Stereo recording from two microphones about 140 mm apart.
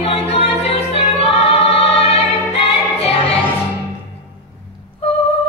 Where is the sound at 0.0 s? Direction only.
45° left (ahead or behind).